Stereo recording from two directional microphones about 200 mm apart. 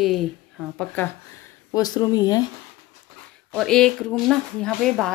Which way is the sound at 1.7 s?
20° left (ahead or behind).